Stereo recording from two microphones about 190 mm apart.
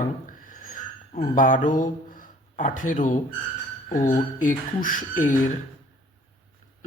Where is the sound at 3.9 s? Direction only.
40° left (ahead or behind).